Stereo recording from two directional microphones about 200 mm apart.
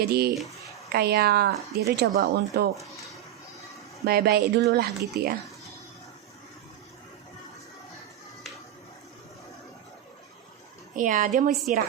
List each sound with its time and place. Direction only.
0.0 s speech: 50° right (ahead or behind)
4.0 s speech: 50° right (ahead or behind)
10.9 s a woman's voice: 40° right (ahead or behind)